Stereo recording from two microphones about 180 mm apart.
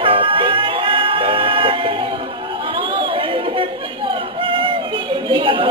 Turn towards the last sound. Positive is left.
turn(degrees=-30)  # may be behind; listen again after turning